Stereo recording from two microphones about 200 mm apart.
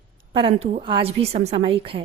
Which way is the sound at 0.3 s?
30° right (ahead or behind).